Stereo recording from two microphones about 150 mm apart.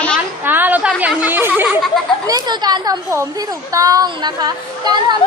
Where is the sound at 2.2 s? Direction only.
25° right (ahead or behind).